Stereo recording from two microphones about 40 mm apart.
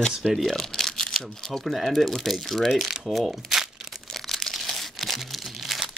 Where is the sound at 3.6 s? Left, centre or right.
Centre.